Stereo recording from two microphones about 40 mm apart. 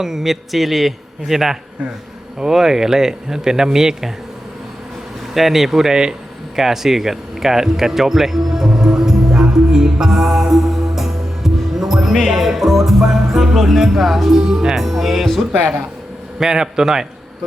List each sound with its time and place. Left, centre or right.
0.0 s speech: centre
5.3 s speech: centre
16.4 s speech: centre